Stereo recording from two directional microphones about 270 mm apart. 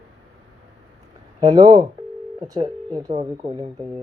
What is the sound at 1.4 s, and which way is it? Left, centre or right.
Speech, centre.